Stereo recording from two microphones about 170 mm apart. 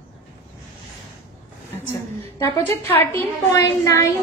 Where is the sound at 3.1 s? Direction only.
20° left (ahead or behind).